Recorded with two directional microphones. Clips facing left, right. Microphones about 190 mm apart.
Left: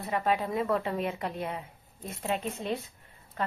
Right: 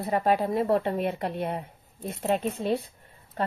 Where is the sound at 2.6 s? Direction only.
35° right (ahead or behind).